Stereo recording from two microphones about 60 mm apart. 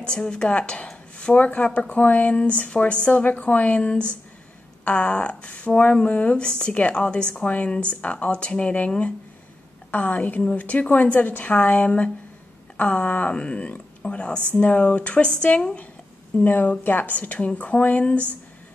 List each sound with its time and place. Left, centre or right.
0.0 s a woman's voice: centre